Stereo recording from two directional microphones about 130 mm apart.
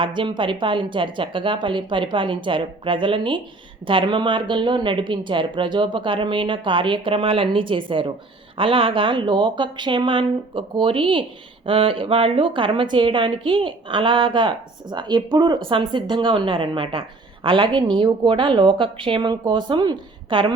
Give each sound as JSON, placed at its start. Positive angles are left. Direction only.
{"t": 0.0, "sound": "a woman's voice", "side_deg": -40}